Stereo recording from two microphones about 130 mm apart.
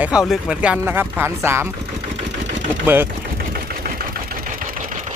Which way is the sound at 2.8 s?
15° right (ahead or behind).